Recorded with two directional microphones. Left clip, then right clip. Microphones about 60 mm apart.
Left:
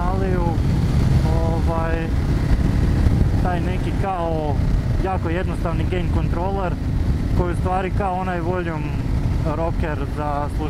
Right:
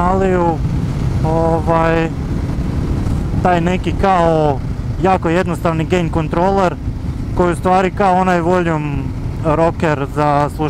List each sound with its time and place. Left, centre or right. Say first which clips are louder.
0.0 s vehicle: right 10 dB; right
1.7 s speech: right 11 dB; right
3.4 s speech: right 14 dB; right